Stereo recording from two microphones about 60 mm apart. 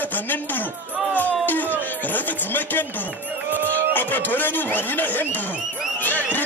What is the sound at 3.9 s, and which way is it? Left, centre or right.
Speech, left.